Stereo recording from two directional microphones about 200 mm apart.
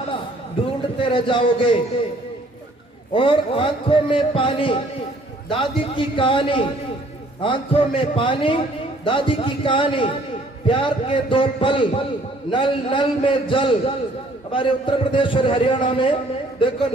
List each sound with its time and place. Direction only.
1.0 s a man's voice: 25° left (ahead or behind)
3.1 s a man's voice: 25° left (ahead or behind)